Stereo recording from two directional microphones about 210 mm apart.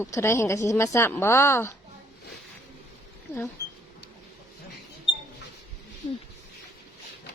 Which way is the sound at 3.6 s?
50° left (ahead or behind).